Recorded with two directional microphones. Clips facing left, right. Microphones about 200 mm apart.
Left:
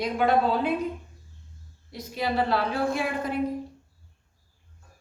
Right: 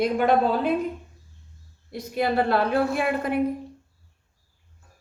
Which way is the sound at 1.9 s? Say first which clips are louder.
Right 4 dB; 55° right (ahead or behind).